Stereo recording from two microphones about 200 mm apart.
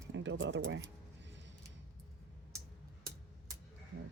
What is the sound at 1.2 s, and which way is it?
Music, 65° right (ahead or behind).